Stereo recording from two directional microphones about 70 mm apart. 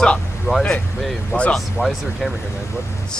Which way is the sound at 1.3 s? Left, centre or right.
Centre.